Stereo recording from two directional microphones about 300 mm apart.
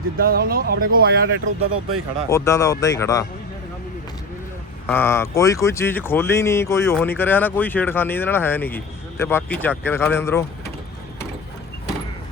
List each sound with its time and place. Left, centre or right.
0.2 s speech: right
2.3 s speech: centre
4.9 s speech: centre